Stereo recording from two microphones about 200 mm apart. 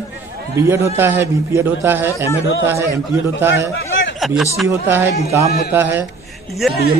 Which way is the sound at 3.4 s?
10° right (ahead or behind).